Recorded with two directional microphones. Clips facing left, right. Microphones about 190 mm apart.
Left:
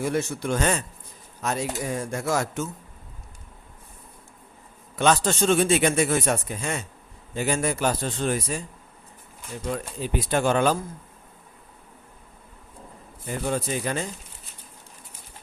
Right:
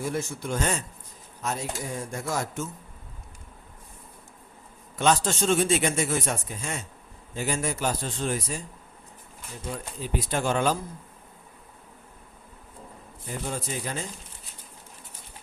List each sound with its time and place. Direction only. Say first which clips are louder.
0.1 s speech: left 4 dB; 75° left (ahead or behind)
4.9 s speech: left 2 dB; 60° left (ahead or behind)
9.6 s speech: left 5 dB; 70° left (ahead or behind)
13.5 s speech: left 7 dB; 65° left (ahead or behind)